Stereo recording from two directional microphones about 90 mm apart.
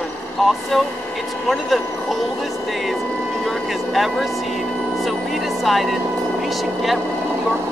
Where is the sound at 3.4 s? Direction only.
Centre (ahead or behind).